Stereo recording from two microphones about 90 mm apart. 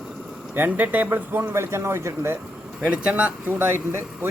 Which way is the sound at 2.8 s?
10° right (ahead or behind).